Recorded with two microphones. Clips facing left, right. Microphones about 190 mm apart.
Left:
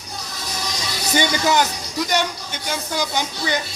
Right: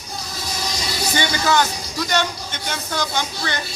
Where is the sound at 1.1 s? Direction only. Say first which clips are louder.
Left 2 dB; 15° left (ahead or behind).